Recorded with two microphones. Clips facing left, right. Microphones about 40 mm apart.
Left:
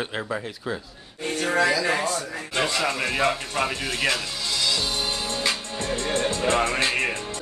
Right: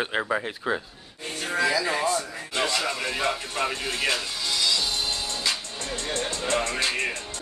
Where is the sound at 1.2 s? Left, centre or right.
Left.